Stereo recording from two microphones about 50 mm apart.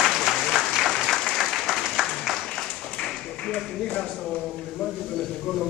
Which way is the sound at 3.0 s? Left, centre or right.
Centre.